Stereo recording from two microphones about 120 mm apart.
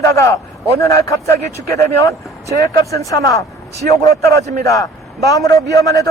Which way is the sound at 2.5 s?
25° left (ahead or behind).